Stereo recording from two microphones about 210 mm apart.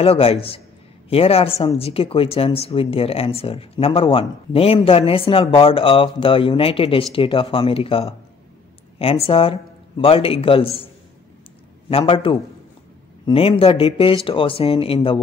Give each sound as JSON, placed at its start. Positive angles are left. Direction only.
{"t": 0.0, "sound": "speech", "side_deg": 30}
{"t": 12.0, "sound": "speech", "side_deg": 25}